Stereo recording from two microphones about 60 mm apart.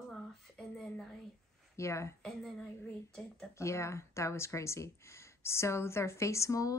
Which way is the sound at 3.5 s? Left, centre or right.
Left.